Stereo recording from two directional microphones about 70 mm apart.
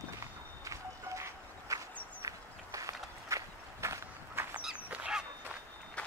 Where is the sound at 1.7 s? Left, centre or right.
Right.